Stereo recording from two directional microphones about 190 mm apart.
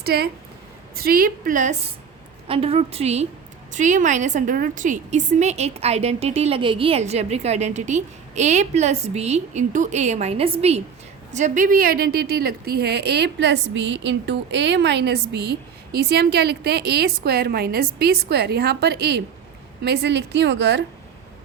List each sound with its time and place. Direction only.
0.0 s a woman's voice: 55° right (ahead or behind)
2.5 s a woman's voice: 30° right (ahead or behind); by 20.8 s 65° right (ahead or behind)